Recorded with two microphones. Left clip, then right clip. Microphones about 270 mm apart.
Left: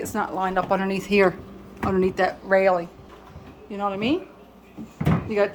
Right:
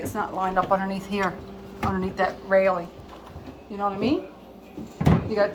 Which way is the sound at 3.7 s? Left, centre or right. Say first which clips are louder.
Even; centre.